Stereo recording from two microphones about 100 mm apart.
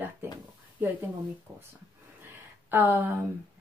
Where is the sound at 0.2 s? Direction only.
20° right (ahead or behind).